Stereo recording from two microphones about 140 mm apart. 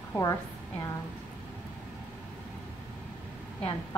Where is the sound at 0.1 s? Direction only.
20° left (ahead or behind).